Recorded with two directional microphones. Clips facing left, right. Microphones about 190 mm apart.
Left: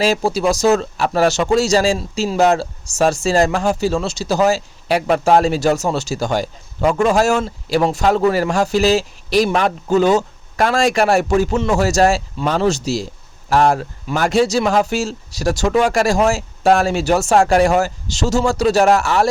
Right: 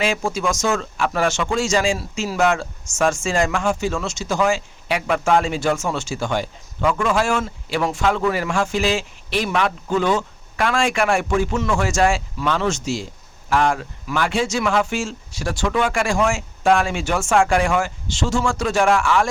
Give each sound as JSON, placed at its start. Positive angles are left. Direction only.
{"t": 0.0, "sound": "speech", "side_deg": 35}